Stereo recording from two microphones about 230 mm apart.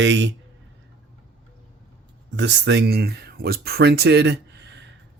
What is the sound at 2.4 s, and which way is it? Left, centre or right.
Speech, right.